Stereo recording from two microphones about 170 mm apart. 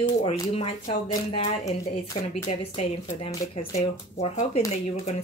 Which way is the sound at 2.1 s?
30° left (ahead or behind).